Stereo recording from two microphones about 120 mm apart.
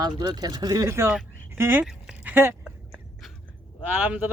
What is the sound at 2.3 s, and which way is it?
Speech, 20° right (ahead or behind).